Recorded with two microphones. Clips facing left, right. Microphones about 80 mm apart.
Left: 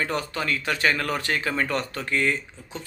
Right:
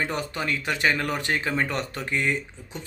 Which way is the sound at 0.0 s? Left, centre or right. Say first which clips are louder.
Left 1 dB; centre.